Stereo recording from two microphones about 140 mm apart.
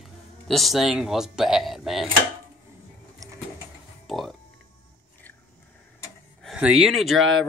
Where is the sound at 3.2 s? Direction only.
25° right (ahead or behind).